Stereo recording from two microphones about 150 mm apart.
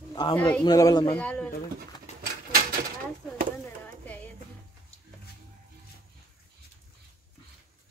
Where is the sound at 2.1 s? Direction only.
50° left (ahead or behind).